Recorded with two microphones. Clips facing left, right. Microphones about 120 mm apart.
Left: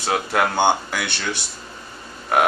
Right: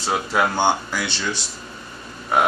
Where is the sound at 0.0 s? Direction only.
60° left (ahead or behind).